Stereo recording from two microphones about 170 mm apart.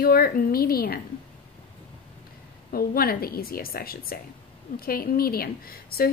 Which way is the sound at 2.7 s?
60° left (ahead or behind).